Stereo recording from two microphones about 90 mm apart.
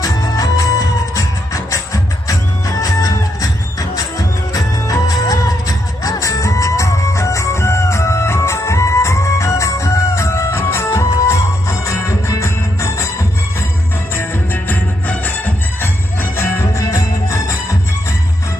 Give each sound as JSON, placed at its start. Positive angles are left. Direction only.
{"t": 0.0, "sound": "music", "side_deg": 40}
{"t": 14.2, "sound": "music", "side_deg": 20}